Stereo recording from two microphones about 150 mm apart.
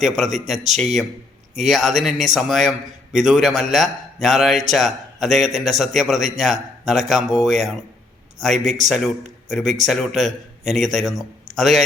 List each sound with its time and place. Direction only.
0.0 s a man's voice: centre (ahead or behind)
8.5 s speech: 50° right (ahead or behind)
9.5 s a man's voice: centre (ahead or behind)